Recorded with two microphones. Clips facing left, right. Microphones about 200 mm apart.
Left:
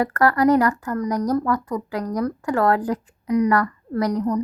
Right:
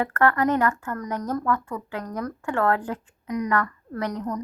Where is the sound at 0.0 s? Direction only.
35° left (ahead or behind).